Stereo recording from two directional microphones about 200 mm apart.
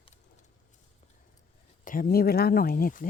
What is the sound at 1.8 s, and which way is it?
Speech, 45° left (ahead or behind).